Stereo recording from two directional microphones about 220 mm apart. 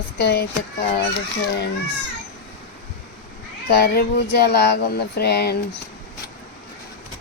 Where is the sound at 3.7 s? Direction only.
45° left (ahead or behind).